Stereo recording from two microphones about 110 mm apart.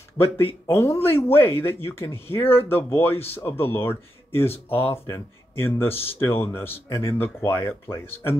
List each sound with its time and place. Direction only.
0.2 s speech: 20° left (ahead or behind)